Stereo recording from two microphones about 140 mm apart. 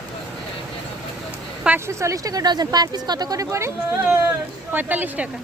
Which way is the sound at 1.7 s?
20° right (ahead or behind).